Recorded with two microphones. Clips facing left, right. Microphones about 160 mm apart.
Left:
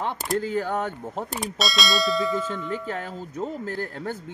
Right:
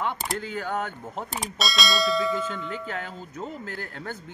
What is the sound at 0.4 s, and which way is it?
Speech, 35° left (ahead or behind).